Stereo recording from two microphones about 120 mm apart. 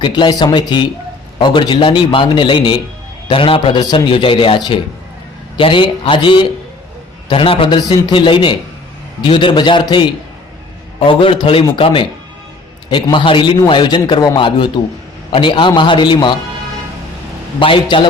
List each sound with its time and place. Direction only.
0.0 s a man's voice: 40° left (ahead or behind)
17.6 s a man's voice: 45° left (ahead or behind)